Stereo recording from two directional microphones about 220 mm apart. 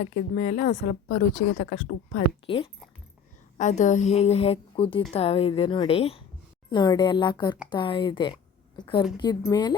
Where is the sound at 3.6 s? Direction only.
35° left (ahead or behind).